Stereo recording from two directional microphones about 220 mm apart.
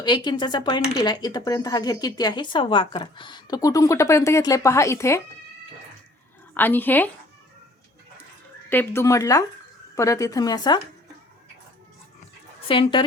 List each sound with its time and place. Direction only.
0.0 s speech: 20° left (ahead or behind)
6.5 s speech: 10° left (ahead or behind)
8.7 s speech: 10° left (ahead or behind)
12.6 s speech: 25° left (ahead or behind)